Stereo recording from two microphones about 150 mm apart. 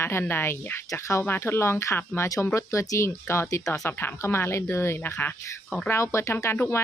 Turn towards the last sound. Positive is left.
turn(degrees=15)  # may be behind; listen again after turning